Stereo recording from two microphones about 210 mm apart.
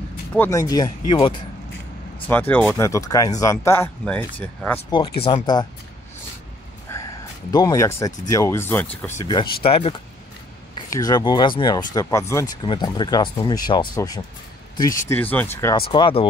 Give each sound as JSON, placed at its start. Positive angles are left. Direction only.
{"t": 0.3, "sound": "speech", "side_deg": 10}
{"t": 2.2, "sound": "speech", "side_deg": 10}
{"t": 4.7, "sound": "speech", "side_deg": 25}
{"t": 6.9, "sound": "a sound", "side_deg": 10}
{"t": 7.5, "sound": "speech", "side_deg": 15}
{"t": 15.7, "sound": "speech", "side_deg": 25}